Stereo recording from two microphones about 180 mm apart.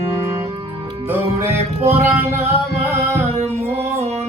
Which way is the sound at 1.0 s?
10° right (ahead or behind).